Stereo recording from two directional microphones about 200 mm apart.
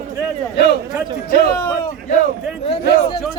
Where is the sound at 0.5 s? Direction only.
55° left (ahead or behind).